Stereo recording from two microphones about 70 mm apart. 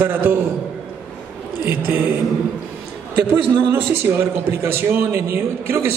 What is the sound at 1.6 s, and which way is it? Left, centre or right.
Speech, right.